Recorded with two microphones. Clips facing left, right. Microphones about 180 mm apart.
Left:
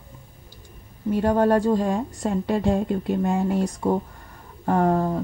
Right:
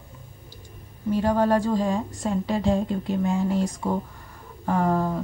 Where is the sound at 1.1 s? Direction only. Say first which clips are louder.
Left 2 dB; 50° left (ahead or behind).